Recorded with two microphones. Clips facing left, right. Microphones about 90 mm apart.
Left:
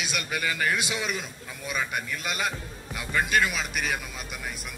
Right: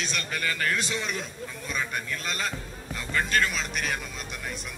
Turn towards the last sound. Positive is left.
turn(degrees=5)  # may be behind; listen again after turning